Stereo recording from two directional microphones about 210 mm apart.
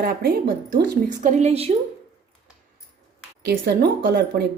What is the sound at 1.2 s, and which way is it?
Speech, 30° right (ahead or behind).